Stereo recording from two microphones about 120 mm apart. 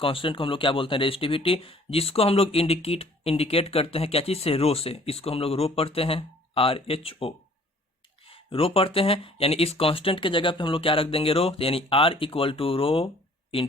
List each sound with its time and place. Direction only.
0.0 s speech: 50° left (ahead or behind)